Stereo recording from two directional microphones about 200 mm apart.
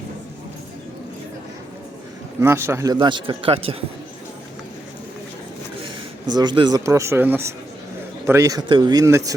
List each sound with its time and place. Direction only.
2.4 s a man's voice: 10° right (ahead or behind)
6.2 s speech: 20° right (ahead or behind)